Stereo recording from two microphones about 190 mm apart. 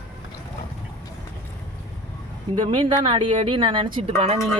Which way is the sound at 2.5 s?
25° right (ahead or behind).